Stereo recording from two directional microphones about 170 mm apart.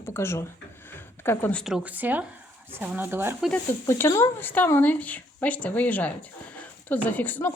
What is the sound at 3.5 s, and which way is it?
Speech, 15° left (ahead or behind).